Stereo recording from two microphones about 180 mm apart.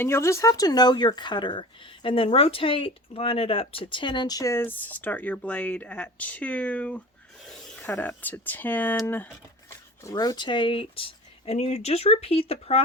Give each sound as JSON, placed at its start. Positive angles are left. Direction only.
{"t": 0.0, "sound": "speech", "side_deg": 15}